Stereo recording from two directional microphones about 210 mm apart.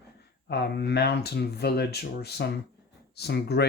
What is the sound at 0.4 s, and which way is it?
Speech, 50° left (ahead or behind).